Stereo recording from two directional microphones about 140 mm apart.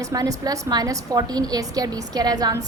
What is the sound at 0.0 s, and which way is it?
A woman's voice, 25° right (ahead or behind).